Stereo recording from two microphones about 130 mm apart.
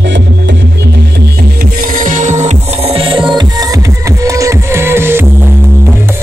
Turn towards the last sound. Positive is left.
turn(degrees=-20)  # may be behind; listen again after turning